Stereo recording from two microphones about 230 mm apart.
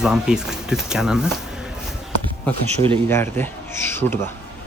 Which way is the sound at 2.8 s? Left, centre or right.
Right.